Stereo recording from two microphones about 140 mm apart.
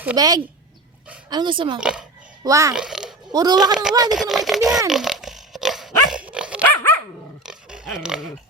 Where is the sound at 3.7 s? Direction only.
5° right (ahead or behind).